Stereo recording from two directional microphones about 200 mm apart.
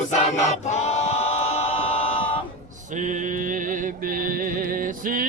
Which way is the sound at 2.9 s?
40° right (ahead or behind).